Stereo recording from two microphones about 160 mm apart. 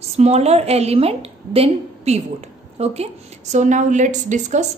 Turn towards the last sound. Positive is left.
turn(degrees=-50)  # may be behind; listen again after turning